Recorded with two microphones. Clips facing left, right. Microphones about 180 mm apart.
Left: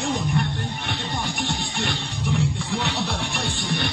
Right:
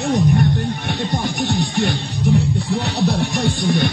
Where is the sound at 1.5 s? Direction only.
40° right (ahead or behind).